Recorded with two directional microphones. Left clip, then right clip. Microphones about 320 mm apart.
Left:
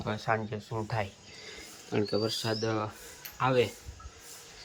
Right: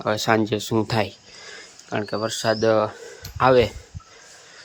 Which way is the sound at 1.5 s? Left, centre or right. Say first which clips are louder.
Right 7 dB; centre.